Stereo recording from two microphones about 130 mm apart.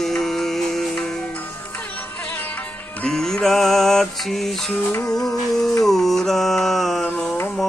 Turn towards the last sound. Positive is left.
turn(degrees=5)  # may be behind; listen again after turning